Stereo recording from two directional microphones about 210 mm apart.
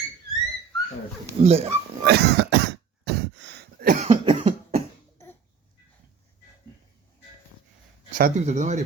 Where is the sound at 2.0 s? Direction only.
50° right (ahead or behind).